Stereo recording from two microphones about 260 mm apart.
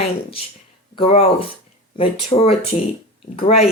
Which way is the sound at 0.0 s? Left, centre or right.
Left.